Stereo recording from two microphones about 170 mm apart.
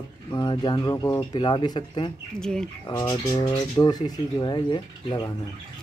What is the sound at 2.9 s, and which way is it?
Speech, 20° left (ahead or behind).